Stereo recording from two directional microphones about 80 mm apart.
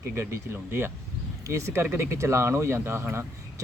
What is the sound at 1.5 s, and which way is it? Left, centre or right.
Speech, right.